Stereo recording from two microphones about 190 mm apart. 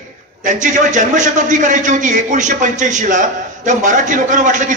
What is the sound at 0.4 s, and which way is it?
A man's voice, 40° right (ahead or behind).